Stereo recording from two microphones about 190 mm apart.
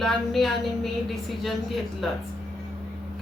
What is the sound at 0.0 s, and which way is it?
A woman's voice, centre (ahead or behind).